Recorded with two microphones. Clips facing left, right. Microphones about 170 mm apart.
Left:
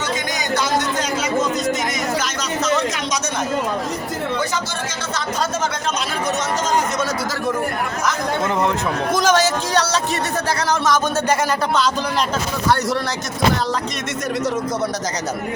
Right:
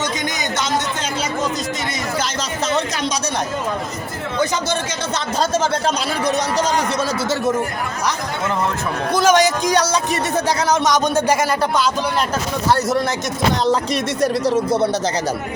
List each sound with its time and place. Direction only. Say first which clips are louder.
9.1 s speech: right 3 dB; 10° right (ahead or behind)
14.2 s speech: right 4 dB; 30° right (ahead or behind)